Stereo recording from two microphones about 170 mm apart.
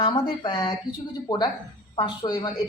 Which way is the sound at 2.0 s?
25° left (ahead or behind).